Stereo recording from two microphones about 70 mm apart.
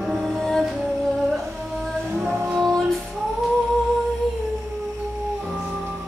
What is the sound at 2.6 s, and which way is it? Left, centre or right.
Music, centre.